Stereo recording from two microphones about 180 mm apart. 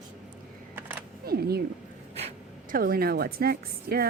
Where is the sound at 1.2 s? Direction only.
60° right (ahead or behind).